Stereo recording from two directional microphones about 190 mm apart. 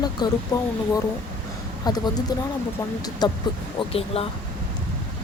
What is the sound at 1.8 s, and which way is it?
Speech, 20° left (ahead or behind).